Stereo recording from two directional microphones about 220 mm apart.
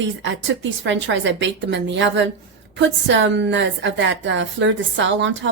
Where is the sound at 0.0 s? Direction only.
55° right (ahead or behind).